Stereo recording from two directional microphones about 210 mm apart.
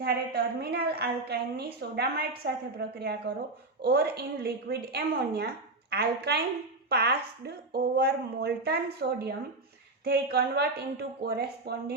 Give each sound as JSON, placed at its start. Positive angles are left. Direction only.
{"t": 0.0, "sound": "a woman's voice", "side_deg": -45}